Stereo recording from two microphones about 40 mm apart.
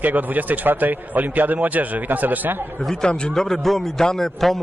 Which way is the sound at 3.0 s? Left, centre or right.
Centre.